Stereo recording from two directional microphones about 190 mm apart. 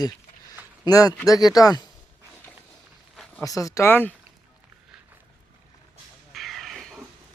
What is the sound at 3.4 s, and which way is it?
Speech, 15° left (ahead or behind).